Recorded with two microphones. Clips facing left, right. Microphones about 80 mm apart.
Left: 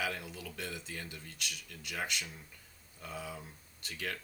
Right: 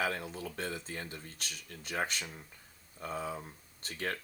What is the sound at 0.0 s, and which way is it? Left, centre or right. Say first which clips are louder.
Speech: right 4 dB; right.